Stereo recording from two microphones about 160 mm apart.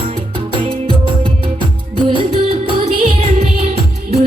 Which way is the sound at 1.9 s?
35° right (ahead or behind).